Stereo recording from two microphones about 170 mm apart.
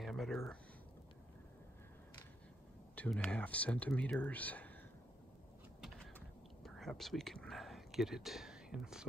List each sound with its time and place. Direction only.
0.0 s a sound: centre (ahead or behind)
3.0 s speech: 5° left (ahead or behind)
6.1 s whispering: centre (ahead or behind)